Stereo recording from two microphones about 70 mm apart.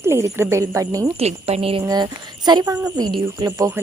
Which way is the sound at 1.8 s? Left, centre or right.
Right.